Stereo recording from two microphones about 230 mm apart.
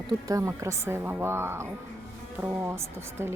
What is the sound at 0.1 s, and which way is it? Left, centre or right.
A woman's voice, centre.